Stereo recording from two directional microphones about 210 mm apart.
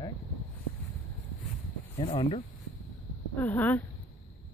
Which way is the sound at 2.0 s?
25° left (ahead or behind).